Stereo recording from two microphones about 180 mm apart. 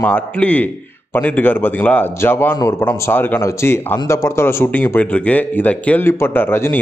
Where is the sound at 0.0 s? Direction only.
10° left (ahead or behind).